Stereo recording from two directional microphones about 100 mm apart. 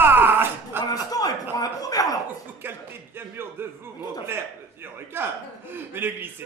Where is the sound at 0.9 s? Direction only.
40° left (ahead or behind).